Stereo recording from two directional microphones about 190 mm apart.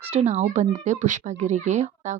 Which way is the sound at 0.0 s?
35° right (ahead or behind).